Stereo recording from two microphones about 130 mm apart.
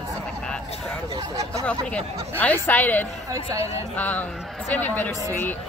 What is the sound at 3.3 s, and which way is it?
Speech, 25° right (ahead or behind).